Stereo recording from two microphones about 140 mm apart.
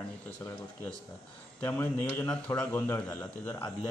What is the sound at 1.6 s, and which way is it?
A man's voice, 15° left (ahead or behind).